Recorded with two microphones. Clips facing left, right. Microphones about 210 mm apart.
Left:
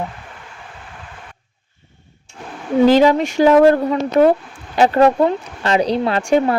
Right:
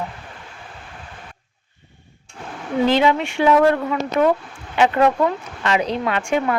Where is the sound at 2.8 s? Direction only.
40° left (ahead or behind).